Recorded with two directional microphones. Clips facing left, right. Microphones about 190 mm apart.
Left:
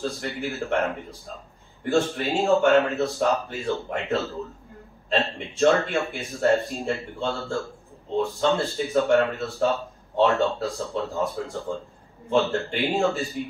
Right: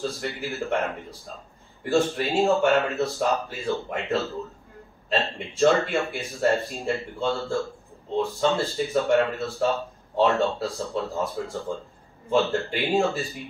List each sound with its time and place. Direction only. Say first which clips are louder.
0.0 s speech: left 1 dB; centre (ahead or behind)
12.5 s speech: right 1 dB; centre (ahead or behind)